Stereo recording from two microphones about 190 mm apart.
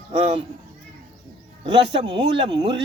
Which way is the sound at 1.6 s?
25° right (ahead or behind).